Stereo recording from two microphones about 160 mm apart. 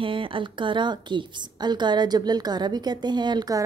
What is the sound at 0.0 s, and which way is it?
A woman's voice, 35° right (ahead or behind).